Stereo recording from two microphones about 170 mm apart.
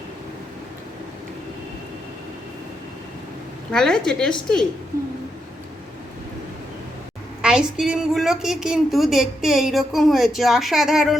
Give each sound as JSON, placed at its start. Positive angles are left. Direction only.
{"t": 3.7, "sound": "a woman's voice", "side_deg": 5}
{"t": 7.4, "sound": "a woman's voice", "side_deg": -5}